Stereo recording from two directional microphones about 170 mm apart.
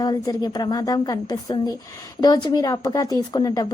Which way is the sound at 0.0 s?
25° left (ahead or behind).